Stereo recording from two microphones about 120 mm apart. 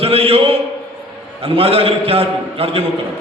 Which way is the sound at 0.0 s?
50° right (ahead or behind).